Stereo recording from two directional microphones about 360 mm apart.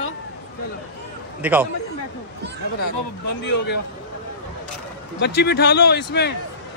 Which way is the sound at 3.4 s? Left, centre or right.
Left.